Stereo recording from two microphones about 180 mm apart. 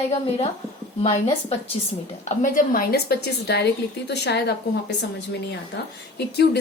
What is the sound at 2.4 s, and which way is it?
A woman's voice, 50° left (ahead or behind).